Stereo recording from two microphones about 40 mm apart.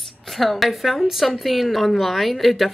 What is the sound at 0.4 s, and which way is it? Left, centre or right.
Speech, centre.